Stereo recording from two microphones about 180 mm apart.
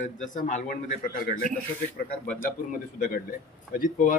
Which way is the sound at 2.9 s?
50° left (ahead or behind).